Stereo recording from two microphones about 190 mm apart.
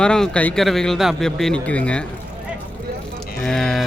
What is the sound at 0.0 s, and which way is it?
Speech, 5° left (ahead or behind).